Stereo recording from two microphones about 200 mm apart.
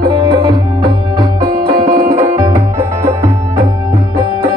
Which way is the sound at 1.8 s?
45° right (ahead or behind).